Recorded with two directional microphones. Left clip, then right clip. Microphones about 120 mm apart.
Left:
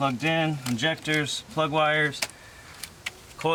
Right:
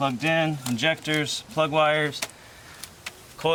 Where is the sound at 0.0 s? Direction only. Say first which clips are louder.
Right 2 dB; 10° right (ahead or behind).